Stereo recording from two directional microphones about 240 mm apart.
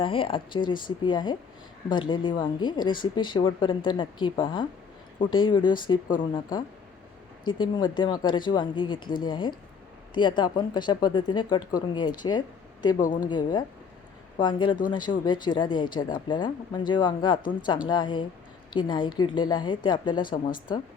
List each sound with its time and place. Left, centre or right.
0.0 s speech: left
13.0 s speech: left
13.2 s speech: centre